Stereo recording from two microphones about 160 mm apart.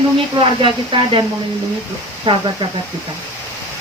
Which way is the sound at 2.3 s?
30° right (ahead or behind).